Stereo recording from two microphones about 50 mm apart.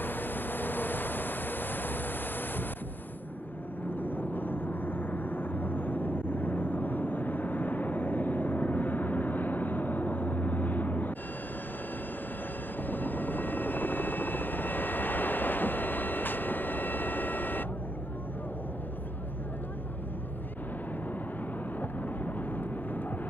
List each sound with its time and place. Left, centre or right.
0.0 s vehicle: left
4.0 s vehicle: left
12.8 s helicopter: left
22.2 s vehicle: left